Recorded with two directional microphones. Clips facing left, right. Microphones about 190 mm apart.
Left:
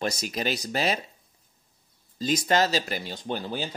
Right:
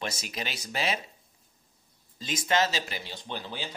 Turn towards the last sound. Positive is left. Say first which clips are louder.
# left 6 dB
turn(degrees=45)  # may be behind; listen again after turning